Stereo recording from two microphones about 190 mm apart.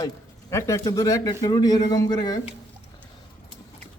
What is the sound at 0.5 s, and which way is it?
A man's voice, 15° left (ahead or behind).